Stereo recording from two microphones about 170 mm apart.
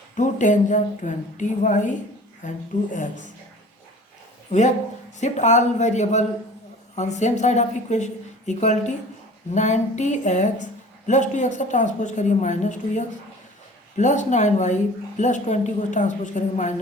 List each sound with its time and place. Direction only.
0.2 s a woman's voice: 50° left (ahead or behind)
5.2 s a woman's voice: 45° left (ahead or behind)